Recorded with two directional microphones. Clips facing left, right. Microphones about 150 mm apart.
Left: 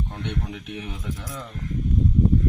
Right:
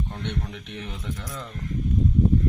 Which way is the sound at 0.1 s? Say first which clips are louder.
Left 1 dB; 5° left (ahead or behind).